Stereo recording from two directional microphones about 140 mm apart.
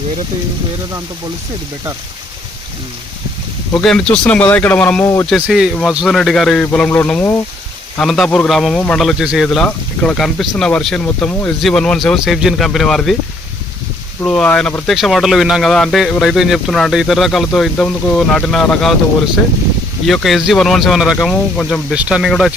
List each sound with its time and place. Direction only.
3.8 s speech: 5° left (ahead or behind)
5.3 s speech: 5° right (ahead or behind)
7.9 s speech: centre (ahead or behind)
14.2 s speech: 5° left (ahead or behind)
20.1 s speech: centre (ahead or behind)
21.9 s speech: 5° right (ahead or behind)